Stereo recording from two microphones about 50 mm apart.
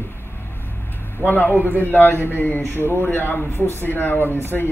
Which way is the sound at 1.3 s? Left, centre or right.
Left.